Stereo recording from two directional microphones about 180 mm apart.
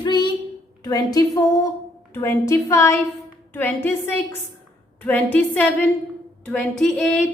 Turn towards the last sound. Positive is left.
turn(degrees=5)  # may be behind; listen again after turning